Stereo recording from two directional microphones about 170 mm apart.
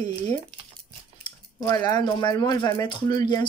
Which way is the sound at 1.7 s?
25° left (ahead or behind).